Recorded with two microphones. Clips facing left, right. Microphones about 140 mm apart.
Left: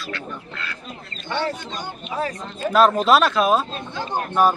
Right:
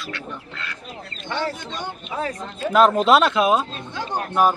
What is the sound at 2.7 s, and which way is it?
A man's voice, 20° right (ahead or behind).